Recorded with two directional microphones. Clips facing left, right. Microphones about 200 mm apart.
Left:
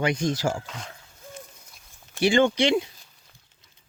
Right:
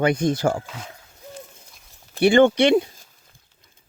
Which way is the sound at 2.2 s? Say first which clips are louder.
Right 5 dB; 60° right (ahead or behind).